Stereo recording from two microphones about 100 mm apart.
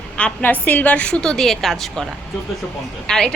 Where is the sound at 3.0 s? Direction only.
5° left (ahead or behind).